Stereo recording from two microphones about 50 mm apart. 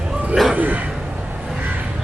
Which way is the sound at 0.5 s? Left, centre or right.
Right.